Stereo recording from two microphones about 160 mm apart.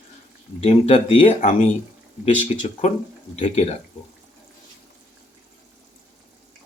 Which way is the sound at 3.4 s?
40° left (ahead or behind).